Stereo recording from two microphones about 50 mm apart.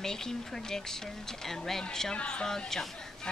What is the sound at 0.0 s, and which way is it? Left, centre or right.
Speech, centre.